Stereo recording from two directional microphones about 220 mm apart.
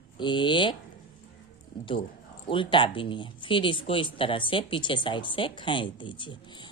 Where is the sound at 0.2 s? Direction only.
20° left (ahead or behind).